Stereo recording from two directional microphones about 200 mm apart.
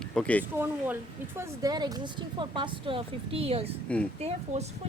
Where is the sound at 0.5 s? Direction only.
10° right (ahead or behind).